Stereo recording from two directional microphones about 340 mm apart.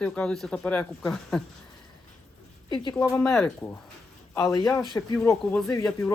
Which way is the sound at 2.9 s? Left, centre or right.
Centre.